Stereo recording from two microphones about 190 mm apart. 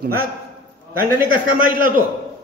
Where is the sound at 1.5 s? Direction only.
45° right (ahead or behind).